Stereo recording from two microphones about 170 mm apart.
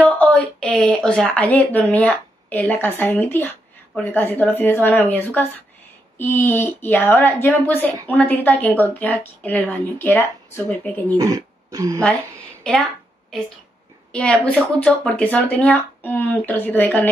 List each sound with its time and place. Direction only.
0.0 s a woman's voice: 5° left (ahead or behind)
11.1 s speech: 20° right (ahead or behind)
14.1 s a woman's voice: 5° left (ahead or behind)